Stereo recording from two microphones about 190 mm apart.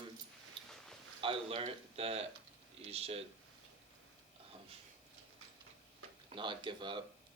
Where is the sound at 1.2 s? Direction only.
30° right (ahead or behind).